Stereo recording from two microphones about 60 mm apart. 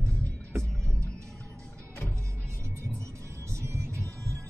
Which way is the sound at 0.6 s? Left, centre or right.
Centre.